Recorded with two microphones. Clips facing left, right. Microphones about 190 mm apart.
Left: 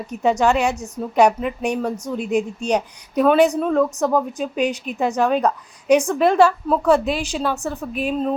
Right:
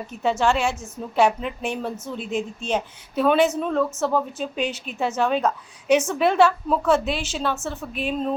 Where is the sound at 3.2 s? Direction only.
Centre (ahead or behind).